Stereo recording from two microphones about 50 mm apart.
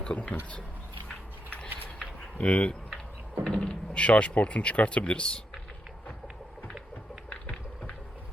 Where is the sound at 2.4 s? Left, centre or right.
Left.